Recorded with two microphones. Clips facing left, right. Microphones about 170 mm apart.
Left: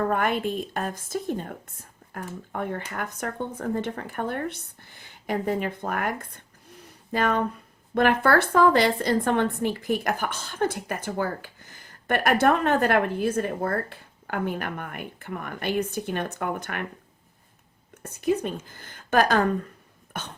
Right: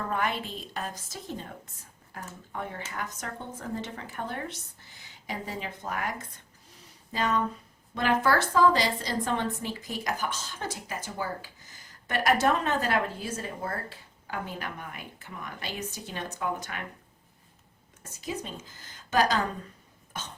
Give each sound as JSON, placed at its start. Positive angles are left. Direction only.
{"t": 0.1, "sound": "a woman's voice", "side_deg": 55}
{"t": 18.0, "sound": "a woman's voice", "side_deg": 60}